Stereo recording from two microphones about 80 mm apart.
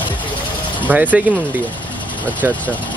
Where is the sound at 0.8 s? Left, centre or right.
Right.